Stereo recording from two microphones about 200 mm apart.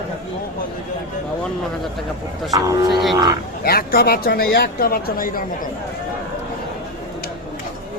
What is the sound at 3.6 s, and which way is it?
Speech, 50° left (ahead or behind).